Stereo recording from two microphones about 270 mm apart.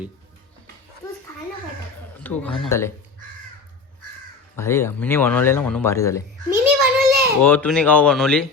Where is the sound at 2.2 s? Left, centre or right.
Centre.